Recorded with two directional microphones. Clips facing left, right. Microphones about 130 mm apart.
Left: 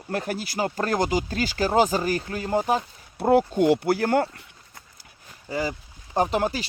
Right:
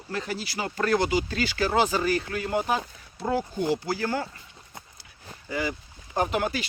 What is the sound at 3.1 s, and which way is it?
Speech, 60° left (ahead or behind).